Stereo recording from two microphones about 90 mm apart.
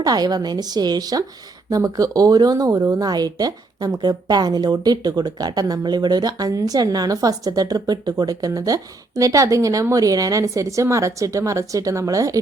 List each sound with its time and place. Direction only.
0.0 s a woman's voice: 45° right (ahead or behind)